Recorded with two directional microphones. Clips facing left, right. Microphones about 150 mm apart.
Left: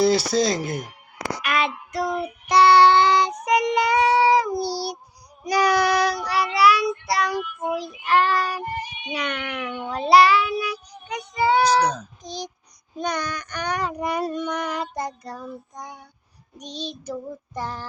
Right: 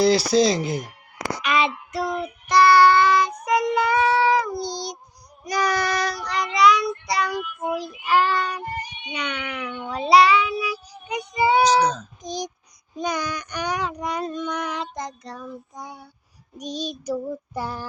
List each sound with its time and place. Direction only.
0.0 s speech: centre (ahead or behind)
1.5 s child singing: centre (ahead or behind)
2.6 s child singing: 20° left (ahead or behind); by 9.0 s 5° left (ahead or behind)
9.1 s speech: centre (ahead or behind)
9.9 s child singing: centre (ahead or behind)
11.1 s child singing: 10° right (ahead or behind)
12.2 s speech: 15° right (ahead or behind)
16.6 s child singing: 10° right (ahead or behind)